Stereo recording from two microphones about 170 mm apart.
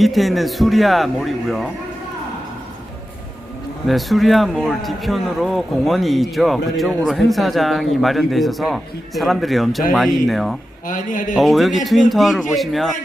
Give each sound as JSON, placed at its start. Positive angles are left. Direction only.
{"t": 0.0, "sound": "a man's voice", "side_deg": 0}
{"t": 3.8, "sound": "a man's voice", "side_deg": 0}
{"t": 10.8, "sound": "a man's voice", "side_deg": 50}
{"t": 11.3, "sound": "a man's voice", "side_deg": 0}